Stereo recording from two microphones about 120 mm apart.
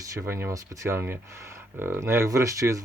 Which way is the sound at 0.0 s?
25° right (ahead or behind).